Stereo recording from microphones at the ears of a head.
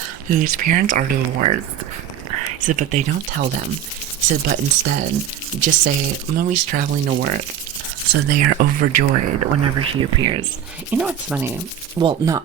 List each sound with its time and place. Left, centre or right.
0.3 s speech: right
11.9 s speech: right